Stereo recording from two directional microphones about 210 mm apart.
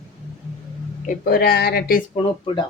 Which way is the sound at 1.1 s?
45° left (ahead or behind).